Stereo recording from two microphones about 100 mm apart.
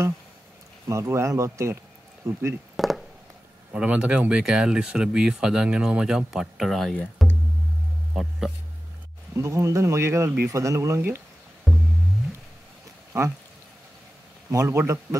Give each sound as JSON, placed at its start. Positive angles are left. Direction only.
{"t": 0.8, "sound": "speech", "side_deg": -30}
{"t": 2.7, "sound": "a sound", "side_deg": 0}
{"t": 3.7, "sound": "speech", "side_deg": -10}
{"t": 8.1, "sound": "speech", "side_deg": -5}
{"t": 9.3, "sound": "speech", "side_deg": -30}
{"t": 11.7, "sound": "music", "side_deg": 0}
{"t": 13.1, "sound": "speech", "side_deg": -30}
{"t": 14.5, "sound": "speech", "side_deg": -30}